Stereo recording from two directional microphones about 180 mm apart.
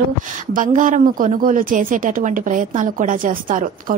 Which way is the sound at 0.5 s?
45° right (ahead or behind).